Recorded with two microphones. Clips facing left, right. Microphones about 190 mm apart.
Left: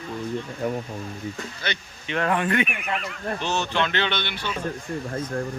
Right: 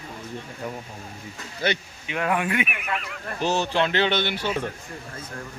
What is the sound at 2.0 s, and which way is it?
Speech, 10° right (ahead or behind).